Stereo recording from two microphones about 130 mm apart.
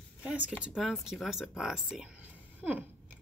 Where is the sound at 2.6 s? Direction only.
10° right (ahead or behind).